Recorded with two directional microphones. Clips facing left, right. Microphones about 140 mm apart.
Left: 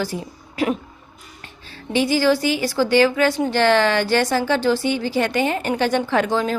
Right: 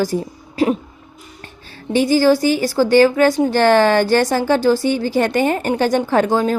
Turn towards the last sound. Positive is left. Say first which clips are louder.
# right 4 dB
turn(degrees=-40)  # may be behind; listen again after turning